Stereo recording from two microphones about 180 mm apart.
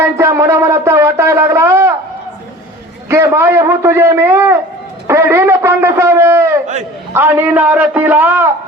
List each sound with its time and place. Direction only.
0.0 s shofar: 15° right (ahead or behind)
3.1 s a man's voice: 15° right (ahead or behind)
5.0 s a sound: 15° right (ahead or behind)
7.1 s a man's voice: 10° right (ahead or behind)